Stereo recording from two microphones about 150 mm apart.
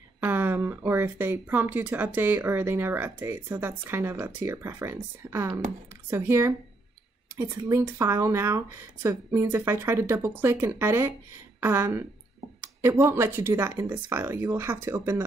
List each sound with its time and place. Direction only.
0.2 s speech: 15° right (ahead or behind)